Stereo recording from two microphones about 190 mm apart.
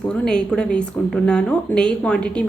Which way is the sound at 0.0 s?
5° left (ahead or behind).